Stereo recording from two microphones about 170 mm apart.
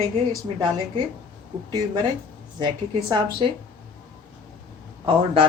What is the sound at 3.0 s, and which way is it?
Speech, 25° right (ahead or behind).